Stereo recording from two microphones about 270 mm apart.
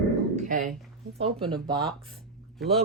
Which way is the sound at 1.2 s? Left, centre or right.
Centre.